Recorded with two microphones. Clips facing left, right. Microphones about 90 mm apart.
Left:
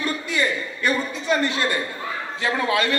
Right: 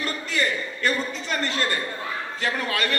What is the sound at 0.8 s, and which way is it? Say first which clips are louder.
A man's voice: left 4 dB; 15° left (ahead or behind).